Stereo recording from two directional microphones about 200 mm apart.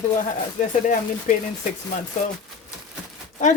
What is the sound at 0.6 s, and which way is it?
Speech, 40° left (ahead or behind).